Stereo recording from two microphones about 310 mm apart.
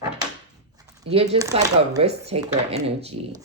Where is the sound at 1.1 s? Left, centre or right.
Centre.